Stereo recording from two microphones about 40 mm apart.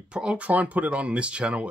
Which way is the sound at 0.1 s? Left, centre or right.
Right.